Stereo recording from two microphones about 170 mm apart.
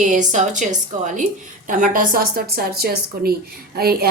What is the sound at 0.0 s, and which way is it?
A woman's voice, 45° right (ahead or behind).